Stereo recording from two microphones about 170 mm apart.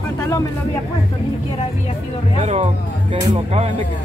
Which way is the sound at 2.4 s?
40° right (ahead or behind).